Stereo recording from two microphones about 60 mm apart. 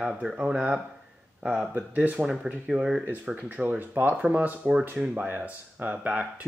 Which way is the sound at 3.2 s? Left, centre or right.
Right.